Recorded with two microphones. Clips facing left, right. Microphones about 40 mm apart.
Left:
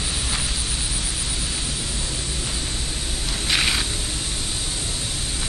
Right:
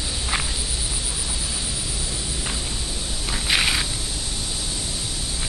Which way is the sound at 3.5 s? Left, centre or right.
Centre.